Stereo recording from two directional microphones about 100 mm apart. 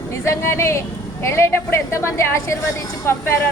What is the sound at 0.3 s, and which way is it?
A woman's voice, 25° left (ahead or behind).